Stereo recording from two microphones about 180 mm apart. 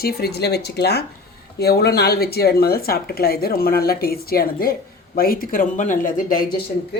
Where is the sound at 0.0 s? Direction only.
60° left (ahead or behind).